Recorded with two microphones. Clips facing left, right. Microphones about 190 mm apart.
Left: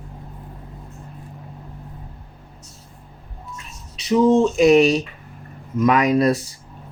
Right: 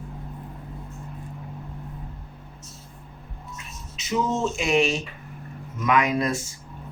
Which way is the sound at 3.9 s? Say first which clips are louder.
Left 10 dB; 35° left (ahead or behind).